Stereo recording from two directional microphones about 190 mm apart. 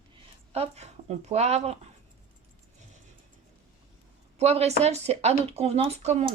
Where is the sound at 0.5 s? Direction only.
35° right (ahead or behind).